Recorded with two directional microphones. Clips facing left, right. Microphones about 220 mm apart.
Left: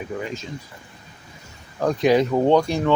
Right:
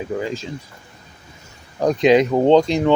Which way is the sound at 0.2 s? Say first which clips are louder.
Right 5 dB; 30° right (ahead or behind).